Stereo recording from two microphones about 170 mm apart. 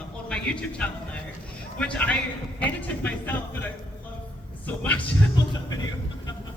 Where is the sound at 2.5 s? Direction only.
10° left (ahead or behind).